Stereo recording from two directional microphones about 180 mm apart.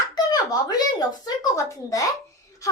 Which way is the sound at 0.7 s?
20° left (ahead or behind).